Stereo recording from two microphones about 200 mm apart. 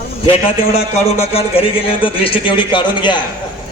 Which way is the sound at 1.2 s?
30° left (ahead or behind).